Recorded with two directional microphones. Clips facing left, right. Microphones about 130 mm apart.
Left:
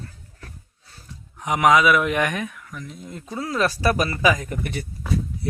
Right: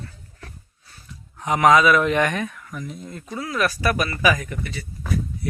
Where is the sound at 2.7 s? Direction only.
10° right (ahead or behind).